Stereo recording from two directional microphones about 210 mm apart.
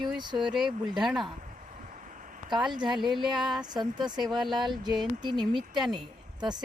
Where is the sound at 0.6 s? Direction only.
Centre (ahead or behind).